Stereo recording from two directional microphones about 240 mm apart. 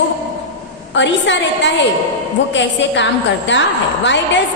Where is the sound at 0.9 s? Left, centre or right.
Left.